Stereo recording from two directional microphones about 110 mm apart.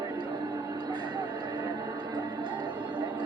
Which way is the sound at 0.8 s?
40° right (ahead or behind).